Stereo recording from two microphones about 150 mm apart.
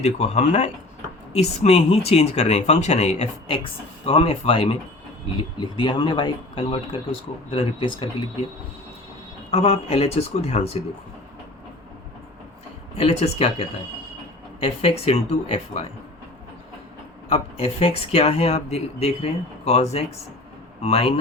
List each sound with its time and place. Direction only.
0.0 s speech: 50° left (ahead or behind)
9.5 s speech: 45° left (ahead or behind)
13.0 s speech: 45° left (ahead or behind)
14.6 s speech: 40° left (ahead or behind)
17.2 s speech: 40° left (ahead or behind)